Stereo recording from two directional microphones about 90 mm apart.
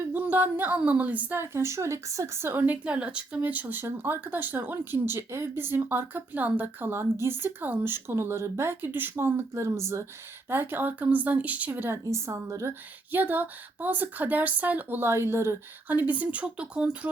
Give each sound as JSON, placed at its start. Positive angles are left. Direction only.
{"t": 0.0, "sound": "a sound", "side_deg": -20}
{"t": 0.8, "sound": "a woman's voice", "side_deg": -15}
{"t": 13.1, "sound": "a woman's voice", "side_deg": -20}